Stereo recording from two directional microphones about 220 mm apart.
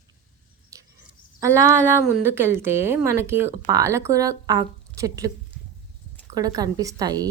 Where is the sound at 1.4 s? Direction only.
10° right (ahead or behind).